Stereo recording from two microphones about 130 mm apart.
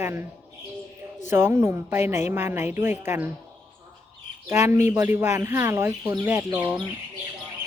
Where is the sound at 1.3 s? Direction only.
20° right (ahead or behind).